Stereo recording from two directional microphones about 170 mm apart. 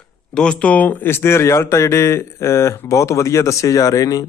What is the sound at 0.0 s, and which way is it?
Speech, 5° left (ahead or behind).